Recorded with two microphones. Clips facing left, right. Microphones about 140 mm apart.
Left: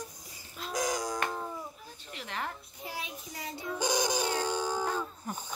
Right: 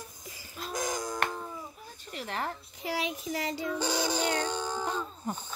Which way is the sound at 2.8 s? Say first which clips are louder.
Right 11 dB; 90° right.